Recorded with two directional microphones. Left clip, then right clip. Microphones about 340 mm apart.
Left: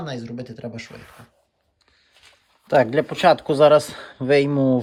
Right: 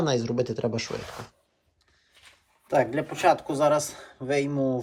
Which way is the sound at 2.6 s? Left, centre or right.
Left.